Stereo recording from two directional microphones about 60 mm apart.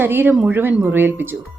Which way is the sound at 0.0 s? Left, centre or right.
Right.